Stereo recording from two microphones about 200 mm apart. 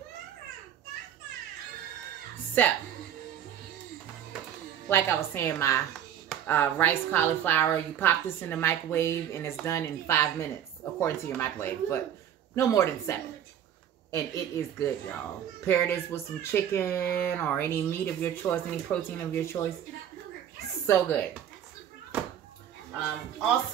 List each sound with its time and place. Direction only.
2.6 s speech: 10° left (ahead or behind)
4.8 s speech: 10° left (ahead or behind)
20.8 s speech: 15° left (ahead or behind)